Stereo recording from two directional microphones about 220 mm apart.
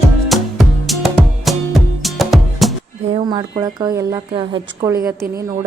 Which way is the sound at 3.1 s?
20° right (ahead or behind).